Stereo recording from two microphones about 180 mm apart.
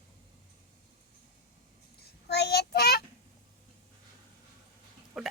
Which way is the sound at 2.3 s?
65° left (ahead or behind).